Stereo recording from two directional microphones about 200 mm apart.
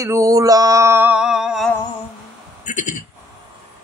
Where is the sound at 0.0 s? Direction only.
15° right (ahead or behind).